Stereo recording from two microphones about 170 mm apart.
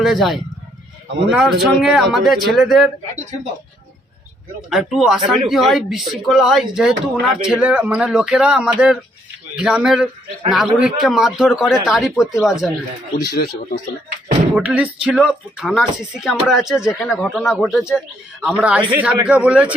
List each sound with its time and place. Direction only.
0.0 s speech: centre (ahead or behind)
4.7 s speech: 5° right (ahead or behind)
13.3 s speech: 60° left (ahead or behind)
14.5 s speech: 5° right (ahead or behind)